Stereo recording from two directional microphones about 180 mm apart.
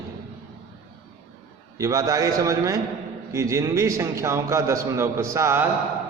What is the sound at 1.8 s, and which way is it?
A man's voice, 20° right (ahead or behind).